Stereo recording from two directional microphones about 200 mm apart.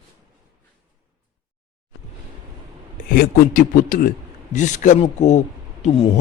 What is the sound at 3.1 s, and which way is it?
A man's voice, 45° left (ahead or behind).